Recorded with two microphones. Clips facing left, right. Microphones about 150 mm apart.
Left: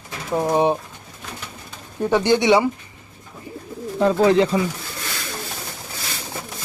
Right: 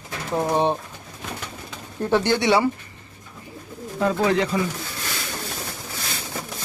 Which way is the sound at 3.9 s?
25° left (ahead or behind).